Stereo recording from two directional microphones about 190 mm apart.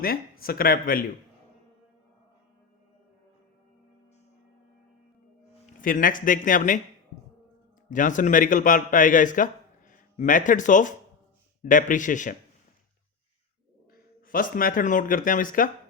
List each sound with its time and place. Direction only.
0.0 s speech: 50° left (ahead or behind)
5.8 s speech: 45° left (ahead or behind)
7.9 s a man's voice: 45° left (ahead or behind)
13.9 s speech: 50° left (ahead or behind)